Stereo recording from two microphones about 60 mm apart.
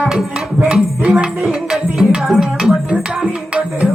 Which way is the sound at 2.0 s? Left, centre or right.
Centre.